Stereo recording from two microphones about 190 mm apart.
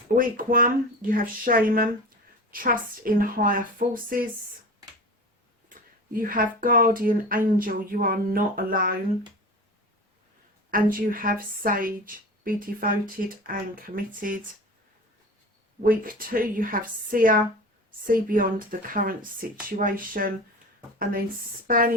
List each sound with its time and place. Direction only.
0.2 s speech: 45° right (ahead or behind)
6.1 s speech: 45° right (ahead or behind)
10.7 s speech: 45° right (ahead or behind)
15.8 s speech: 45° right (ahead or behind)
21.7 s speech: 45° right (ahead or behind)